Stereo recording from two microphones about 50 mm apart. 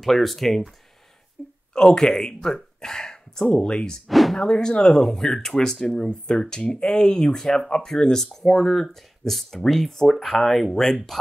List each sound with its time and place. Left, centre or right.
0.0 s speech: centre
1.7 s speech: centre
4.1 s a sound: centre
4.4 s speech: centre